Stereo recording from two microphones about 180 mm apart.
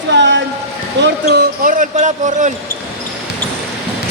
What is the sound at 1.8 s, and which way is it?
Speech, 40° right (ahead or behind).